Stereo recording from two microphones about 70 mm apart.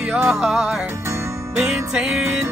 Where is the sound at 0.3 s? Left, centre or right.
Centre.